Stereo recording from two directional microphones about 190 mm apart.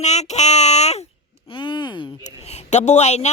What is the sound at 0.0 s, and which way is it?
Child singing, 35° left (ahead or behind).